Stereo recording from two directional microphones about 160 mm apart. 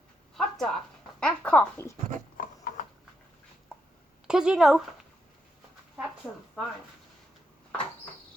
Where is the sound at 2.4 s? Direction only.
60° left (ahead or behind).